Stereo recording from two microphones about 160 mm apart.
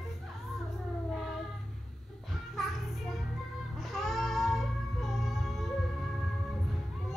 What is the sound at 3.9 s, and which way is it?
Music, centre (ahead or behind).